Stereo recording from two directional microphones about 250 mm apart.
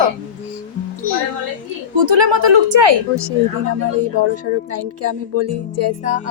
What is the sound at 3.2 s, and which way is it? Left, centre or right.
Speech, right.